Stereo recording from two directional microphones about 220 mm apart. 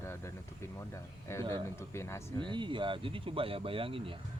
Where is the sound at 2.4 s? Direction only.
20° right (ahead or behind).